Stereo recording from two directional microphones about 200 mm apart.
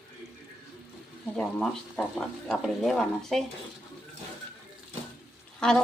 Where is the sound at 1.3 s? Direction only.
5° left (ahead or behind).